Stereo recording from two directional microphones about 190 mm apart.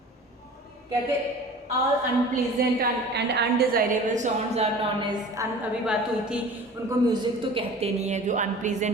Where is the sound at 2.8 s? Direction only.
60° right (ahead or behind); by 5.1 s 35° right (ahead or behind).